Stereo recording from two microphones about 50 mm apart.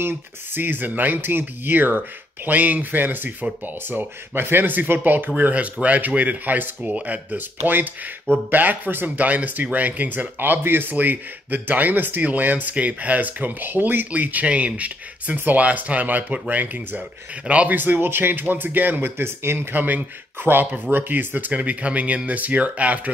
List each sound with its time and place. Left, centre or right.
0.0 s speech: right
5.3 s speech: right
17.7 s speech: right
19.7 s speech: right
20.4 s speech: right